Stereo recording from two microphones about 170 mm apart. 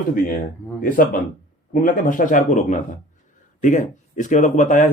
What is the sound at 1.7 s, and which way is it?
Speech, 50° left (ahead or behind).